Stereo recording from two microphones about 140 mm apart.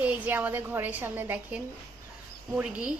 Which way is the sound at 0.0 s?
10° right (ahead or behind).